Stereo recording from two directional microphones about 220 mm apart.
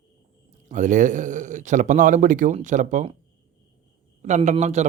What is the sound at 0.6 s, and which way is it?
Speech, 35° right (ahead or behind).